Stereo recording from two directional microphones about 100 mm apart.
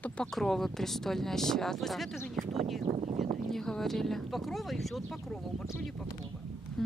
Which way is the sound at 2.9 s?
40° right (ahead or behind).